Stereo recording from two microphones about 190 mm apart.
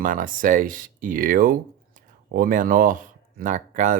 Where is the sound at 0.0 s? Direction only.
45° right (ahead or behind).